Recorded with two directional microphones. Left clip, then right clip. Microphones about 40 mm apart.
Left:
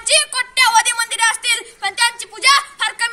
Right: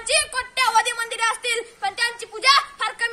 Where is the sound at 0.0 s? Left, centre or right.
Centre.